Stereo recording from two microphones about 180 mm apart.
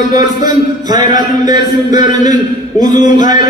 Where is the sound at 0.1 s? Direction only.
20° right (ahead or behind).